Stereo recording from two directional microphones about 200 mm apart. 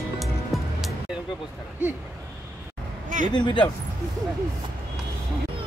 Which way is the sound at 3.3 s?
20° left (ahead or behind).